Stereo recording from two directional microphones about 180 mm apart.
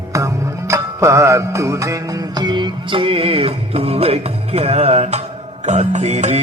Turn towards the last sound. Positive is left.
turn(degrees=-40)  # may be behind; listen again after turning